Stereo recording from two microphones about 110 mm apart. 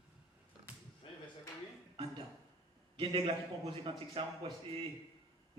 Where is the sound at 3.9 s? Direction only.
50° right (ahead or behind).